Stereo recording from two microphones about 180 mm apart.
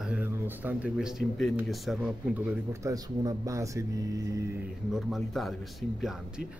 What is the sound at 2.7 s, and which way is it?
Speech, 20° right (ahead or behind).